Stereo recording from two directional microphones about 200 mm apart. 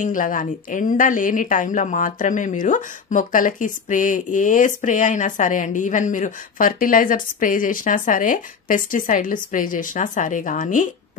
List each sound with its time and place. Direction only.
0.0 s speech: 40° left (ahead or behind)